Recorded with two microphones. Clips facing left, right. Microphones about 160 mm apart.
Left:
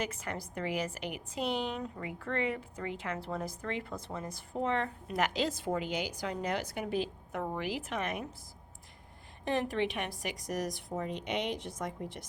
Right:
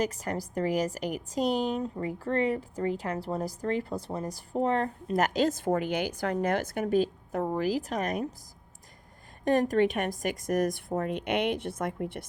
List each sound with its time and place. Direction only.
0.0 s a woman's voice: 40° right (ahead or behind)
9.4 s a woman's voice: 45° right (ahead or behind)